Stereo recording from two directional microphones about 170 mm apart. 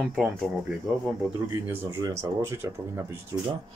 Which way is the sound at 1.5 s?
15° right (ahead or behind).